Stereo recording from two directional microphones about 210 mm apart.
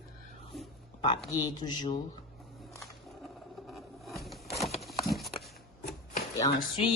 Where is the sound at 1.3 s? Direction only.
20° left (ahead or behind).